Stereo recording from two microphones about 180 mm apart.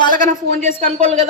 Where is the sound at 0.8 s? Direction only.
35° right (ahead or behind).